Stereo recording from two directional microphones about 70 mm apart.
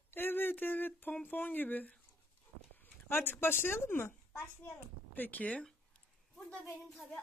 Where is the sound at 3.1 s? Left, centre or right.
Left.